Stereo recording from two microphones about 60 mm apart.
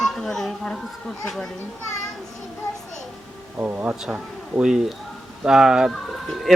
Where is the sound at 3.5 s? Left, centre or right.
Right.